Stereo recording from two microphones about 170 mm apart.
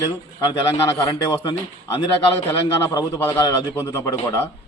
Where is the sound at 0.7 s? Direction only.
15° left (ahead or behind).